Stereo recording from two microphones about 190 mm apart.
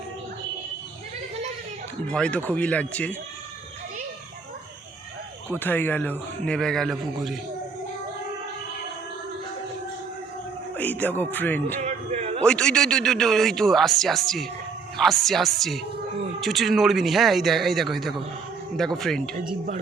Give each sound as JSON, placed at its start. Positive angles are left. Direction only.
{"t": 2.0, "sound": "speech", "side_deg": 5}
{"t": 5.5, "sound": "a man's voice", "side_deg": 10}
{"t": 10.8, "sound": "speech", "side_deg": 10}
{"t": 11.8, "sound": "music", "side_deg": -35}
{"t": 12.4, "sound": "a man's voice", "side_deg": 5}